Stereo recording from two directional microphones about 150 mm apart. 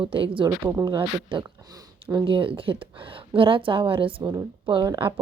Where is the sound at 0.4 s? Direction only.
20° right (ahead or behind).